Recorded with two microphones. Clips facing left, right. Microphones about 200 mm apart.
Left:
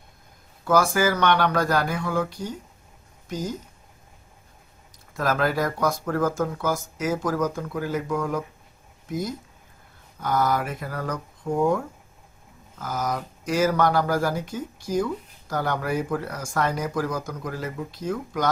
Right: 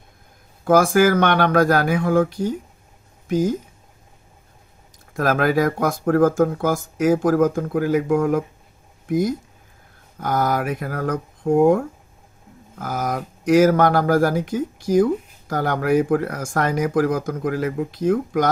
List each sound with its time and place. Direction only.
0.6 s speech: 50° right (ahead or behind)
5.1 s speech: 55° right (ahead or behind)